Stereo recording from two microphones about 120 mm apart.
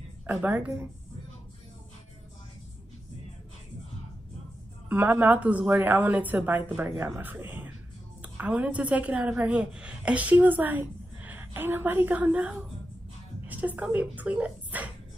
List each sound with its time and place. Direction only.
0.3 s a woman's voice: 15° right (ahead or behind)
4.8 s a woman's voice: 15° right (ahead or behind)